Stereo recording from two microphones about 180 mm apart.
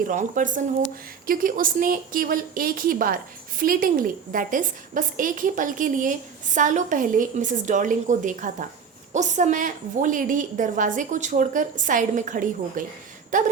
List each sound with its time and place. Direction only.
0.1 s a woman's voice: 45° right (ahead or behind)